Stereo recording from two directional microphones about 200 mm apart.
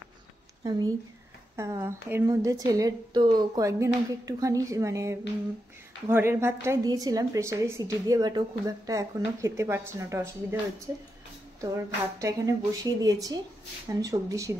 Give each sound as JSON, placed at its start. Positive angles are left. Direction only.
{"t": 0.7, "sound": "a woman's voice", "side_deg": -20}
{"t": 11.7, "sound": "a woman's voice", "side_deg": -15}